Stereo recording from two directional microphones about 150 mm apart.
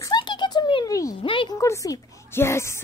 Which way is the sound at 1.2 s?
35° left (ahead or behind).